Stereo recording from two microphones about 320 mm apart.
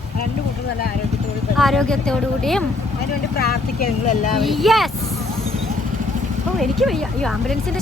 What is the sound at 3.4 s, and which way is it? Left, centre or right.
Speech, left.